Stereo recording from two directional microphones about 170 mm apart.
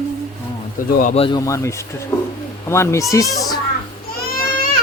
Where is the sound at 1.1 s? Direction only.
30° left (ahead or behind).